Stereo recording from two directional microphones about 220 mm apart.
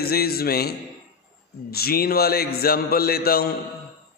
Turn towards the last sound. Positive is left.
turn(degrees=45)  # may be behind; listen again after turning